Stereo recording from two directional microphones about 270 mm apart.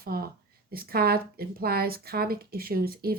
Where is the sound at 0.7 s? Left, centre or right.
Right.